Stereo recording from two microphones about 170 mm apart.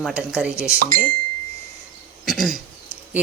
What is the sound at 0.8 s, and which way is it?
Speech, 60° right (ahead or behind).